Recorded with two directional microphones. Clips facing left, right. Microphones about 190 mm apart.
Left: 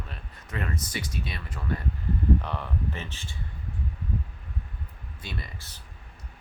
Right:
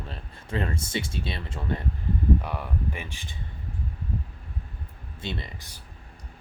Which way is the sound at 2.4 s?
10° right (ahead or behind).